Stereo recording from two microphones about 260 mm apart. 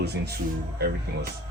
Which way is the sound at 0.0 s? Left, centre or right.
Right.